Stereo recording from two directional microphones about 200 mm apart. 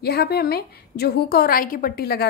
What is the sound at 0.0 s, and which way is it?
A woman's voice, 50° left (ahead or behind).